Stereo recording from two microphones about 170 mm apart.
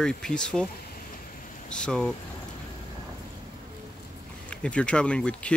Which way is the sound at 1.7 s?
5° left (ahead or behind).